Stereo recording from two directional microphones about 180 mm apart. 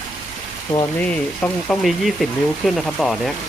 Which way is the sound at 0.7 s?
25° left (ahead or behind).